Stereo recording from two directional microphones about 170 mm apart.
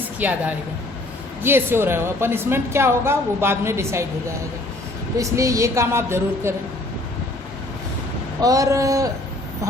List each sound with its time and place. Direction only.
0.2 s speech: 10° right (ahead or behind)
1.4 s speech: 15° right (ahead or behind)
5.1 s speech: 20° right (ahead or behind)
8.4 s speech: 20° right (ahead or behind)